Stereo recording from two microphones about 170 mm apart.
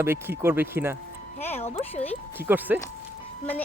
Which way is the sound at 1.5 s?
35° left (ahead or behind).